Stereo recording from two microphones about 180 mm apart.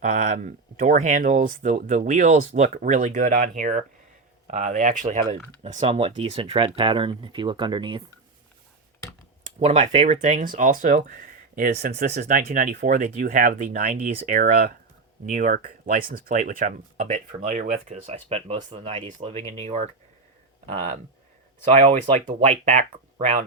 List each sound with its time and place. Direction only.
0.0 s speech: 45° right (ahead or behind); by 8.0 s 25° right (ahead or behind)
9.6 s speech: 35° right (ahead or behind)
21.7 s speech: 40° right (ahead or behind)